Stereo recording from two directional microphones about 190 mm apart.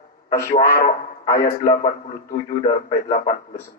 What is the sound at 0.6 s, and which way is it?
Speech, 50° left (ahead or behind).